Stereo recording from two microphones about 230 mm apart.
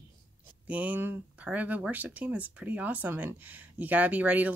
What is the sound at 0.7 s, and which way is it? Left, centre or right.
Speech, centre.